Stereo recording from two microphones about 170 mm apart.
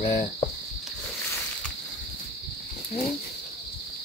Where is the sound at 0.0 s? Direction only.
40° left (ahead or behind).